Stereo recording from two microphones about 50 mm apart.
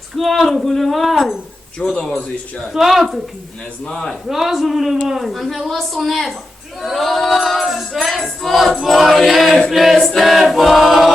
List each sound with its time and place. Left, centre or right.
0.2 s music: centre
1.8 s a man's voice: centre
2.7 s music: centre
3.8 s a man's voice: centre
4.3 s music: centre